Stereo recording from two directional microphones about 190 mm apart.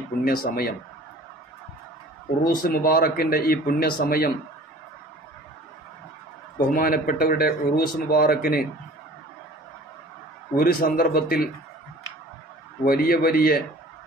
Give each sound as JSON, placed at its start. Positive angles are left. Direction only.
{"t": 0.2, "sound": "speech", "side_deg": 50}
{"t": 2.4, "sound": "speech", "side_deg": 50}
{"t": 6.7, "sound": "speech", "side_deg": 50}
{"t": 10.6, "sound": "speech", "side_deg": 50}
{"t": 12.8, "sound": "speech", "side_deg": 50}